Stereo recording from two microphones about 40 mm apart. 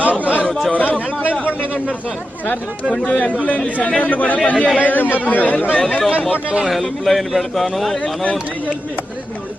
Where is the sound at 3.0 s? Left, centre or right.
Left.